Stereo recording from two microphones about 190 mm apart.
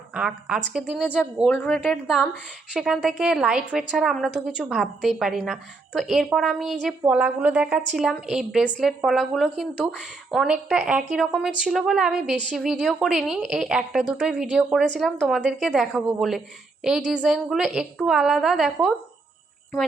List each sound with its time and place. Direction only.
0.1 s a woman's voice: 5° right (ahead or behind)